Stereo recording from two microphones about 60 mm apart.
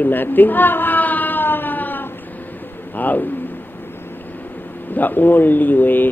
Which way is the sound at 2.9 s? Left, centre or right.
Left.